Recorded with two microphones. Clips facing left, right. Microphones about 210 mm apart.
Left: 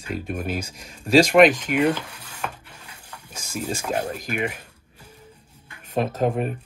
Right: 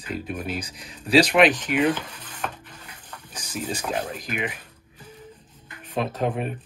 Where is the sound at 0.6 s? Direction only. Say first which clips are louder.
Left 2 dB; 45° left (ahead or behind).